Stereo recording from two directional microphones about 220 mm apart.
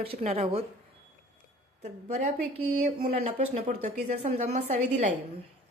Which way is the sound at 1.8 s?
30° right (ahead or behind).